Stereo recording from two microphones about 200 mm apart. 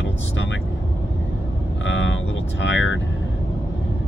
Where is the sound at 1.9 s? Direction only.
70° left (ahead or behind).